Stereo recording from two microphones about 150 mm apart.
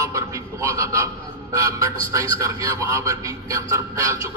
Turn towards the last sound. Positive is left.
turn(degrees=-20)  # may be behind; listen again after turning